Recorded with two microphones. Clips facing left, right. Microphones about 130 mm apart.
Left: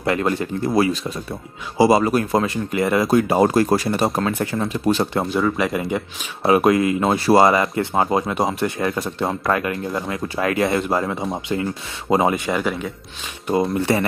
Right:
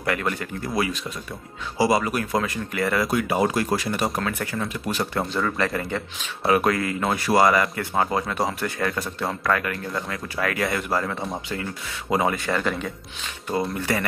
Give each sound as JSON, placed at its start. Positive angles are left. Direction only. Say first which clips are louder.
{"t": 0.0, "sound": "speech", "louder": "left 6 dB", "side_deg": 25}
{"t": 3.1, "sound": "speech", "louder": "left 6 dB", "side_deg": 35}
{"t": 5.3, "sound": "speech", "louder": "left 5 dB", "side_deg": 10}
{"t": 12.4, "sound": "speech", "louder": "left 3 dB", "side_deg": 10}
{"t": 13.7, "sound": "speech", "louder": "left 6 dB", "side_deg": 25}